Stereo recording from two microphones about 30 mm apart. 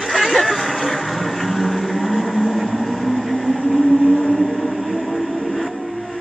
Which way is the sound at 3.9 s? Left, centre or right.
Left.